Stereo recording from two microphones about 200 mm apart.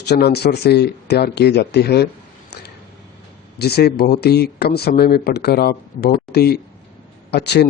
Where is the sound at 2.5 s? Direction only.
55° left (ahead or behind).